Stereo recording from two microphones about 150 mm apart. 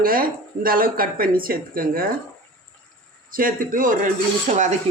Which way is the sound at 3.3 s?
65° right (ahead or behind).